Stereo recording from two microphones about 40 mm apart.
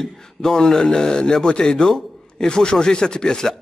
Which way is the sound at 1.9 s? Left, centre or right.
Centre.